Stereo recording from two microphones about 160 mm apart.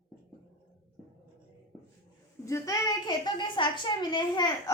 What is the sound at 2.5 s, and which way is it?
A woman's voice, 20° left (ahead or behind).